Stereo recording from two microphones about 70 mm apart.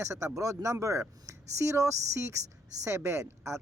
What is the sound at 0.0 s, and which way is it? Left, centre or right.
A man's voice, right.